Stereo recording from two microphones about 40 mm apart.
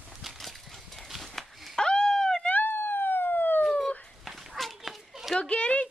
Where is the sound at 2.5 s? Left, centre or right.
Left.